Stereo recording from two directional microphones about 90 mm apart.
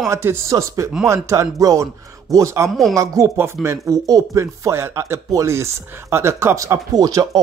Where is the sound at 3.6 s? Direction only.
35° right (ahead or behind).